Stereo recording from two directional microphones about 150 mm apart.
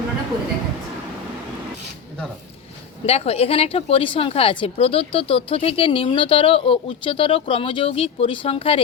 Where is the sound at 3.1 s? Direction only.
40° left (ahead or behind).